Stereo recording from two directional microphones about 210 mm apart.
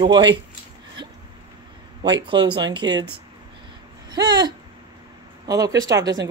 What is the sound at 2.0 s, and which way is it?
Speech, 20° right (ahead or behind).